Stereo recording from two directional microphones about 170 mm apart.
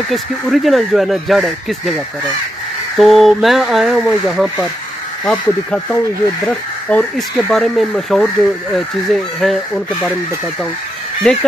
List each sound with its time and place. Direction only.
0.1 s speech: centre (ahead or behind)
3.0 s speech: centre (ahead or behind)
11.3 s speech: 5° left (ahead or behind)